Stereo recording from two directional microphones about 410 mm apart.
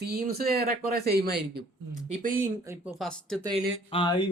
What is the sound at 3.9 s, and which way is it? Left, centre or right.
Speech, centre.